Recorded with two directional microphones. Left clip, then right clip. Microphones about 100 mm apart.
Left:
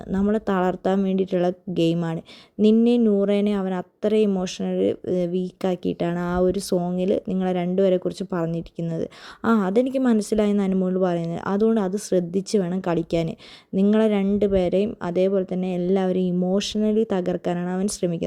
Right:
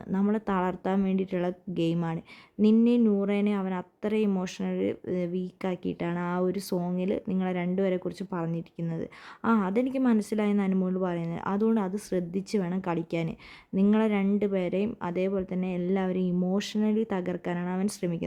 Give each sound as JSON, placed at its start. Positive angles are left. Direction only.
{"t": 0.3, "sound": "speech", "side_deg": 30}
{"t": 3.2, "sound": "speech", "side_deg": 30}